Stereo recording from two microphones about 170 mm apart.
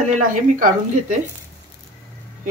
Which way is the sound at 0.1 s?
50° right (ahead or behind).